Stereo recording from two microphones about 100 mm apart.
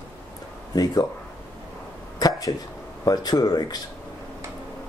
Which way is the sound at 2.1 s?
40° left (ahead or behind).